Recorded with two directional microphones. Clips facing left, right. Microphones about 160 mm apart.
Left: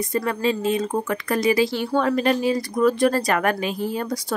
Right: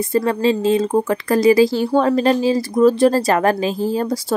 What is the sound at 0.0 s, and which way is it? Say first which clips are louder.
A woman's voice: right 6 dB; 30° right (ahead or behind).